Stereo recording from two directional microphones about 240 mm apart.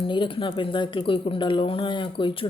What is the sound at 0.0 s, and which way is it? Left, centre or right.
A woman's voice, left.